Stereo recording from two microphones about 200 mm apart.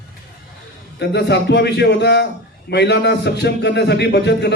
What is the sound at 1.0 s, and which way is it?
A man's voice, 55° left (ahead or behind).